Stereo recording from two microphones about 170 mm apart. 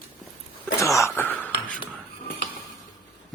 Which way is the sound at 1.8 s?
55° left (ahead or behind).